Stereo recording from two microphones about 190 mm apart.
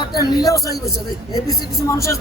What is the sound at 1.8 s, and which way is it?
Speech, 15° left (ahead or behind).